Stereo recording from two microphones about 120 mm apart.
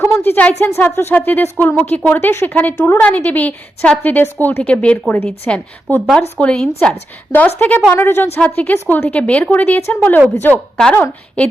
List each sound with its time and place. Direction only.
0.0 s a woman's voice: 15° left (ahead or behind)